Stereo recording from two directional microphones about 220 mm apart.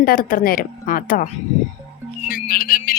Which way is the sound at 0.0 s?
40° left (ahead or behind).